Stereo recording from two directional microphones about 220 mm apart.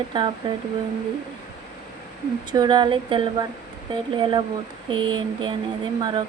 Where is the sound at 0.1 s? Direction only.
20° right (ahead or behind).